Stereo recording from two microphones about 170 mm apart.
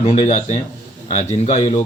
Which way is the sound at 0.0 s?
35° left (ahead or behind).